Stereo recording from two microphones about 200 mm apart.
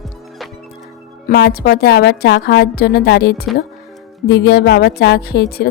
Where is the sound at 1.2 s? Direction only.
50° left (ahead or behind).